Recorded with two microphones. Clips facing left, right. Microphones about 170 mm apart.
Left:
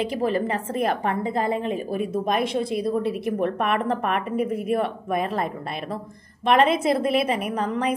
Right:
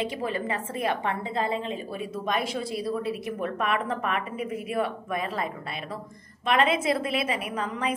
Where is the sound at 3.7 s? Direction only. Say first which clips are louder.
Left 4 dB; 50° left (ahead or behind).